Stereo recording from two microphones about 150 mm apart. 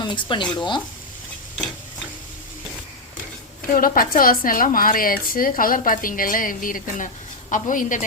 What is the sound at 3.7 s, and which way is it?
A woman's voice, 65° left (ahead or behind).